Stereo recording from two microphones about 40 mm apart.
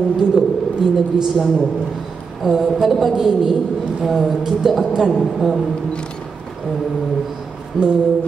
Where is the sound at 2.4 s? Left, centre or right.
Centre.